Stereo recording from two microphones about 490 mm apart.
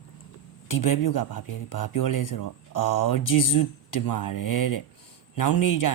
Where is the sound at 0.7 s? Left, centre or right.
Left.